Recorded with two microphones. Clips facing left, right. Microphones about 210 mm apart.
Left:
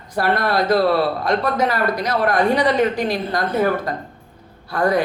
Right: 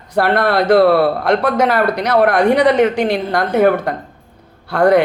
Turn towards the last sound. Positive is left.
turn(degrees=-70)  # may be behind; listen again after turning